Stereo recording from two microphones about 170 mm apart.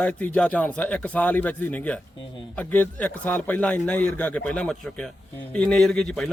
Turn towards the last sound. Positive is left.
turn(degrees=5)  # may be behind; listen again after turning